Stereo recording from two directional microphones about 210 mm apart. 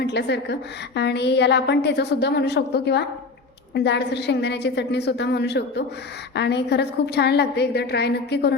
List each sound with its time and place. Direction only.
0.0 s a woman's voice: 55° left (ahead or behind)